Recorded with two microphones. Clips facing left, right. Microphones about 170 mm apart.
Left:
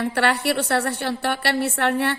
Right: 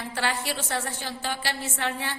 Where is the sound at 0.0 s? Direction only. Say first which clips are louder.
Left 8 dB; 65° left (ahead or behind).